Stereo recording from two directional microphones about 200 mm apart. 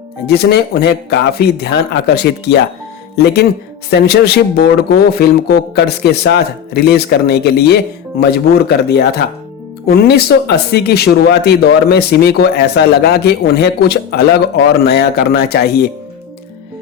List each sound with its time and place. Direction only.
0.3 s speech: 55° left (ahead or behind)
3.8 s speech: 55° left (ahead or behind)